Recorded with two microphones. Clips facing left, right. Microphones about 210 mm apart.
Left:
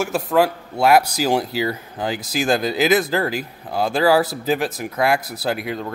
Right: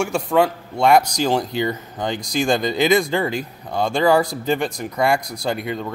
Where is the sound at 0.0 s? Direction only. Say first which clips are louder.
Even; 5° left (ahead or behind).